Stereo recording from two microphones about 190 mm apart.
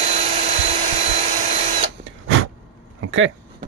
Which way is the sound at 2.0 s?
90° right.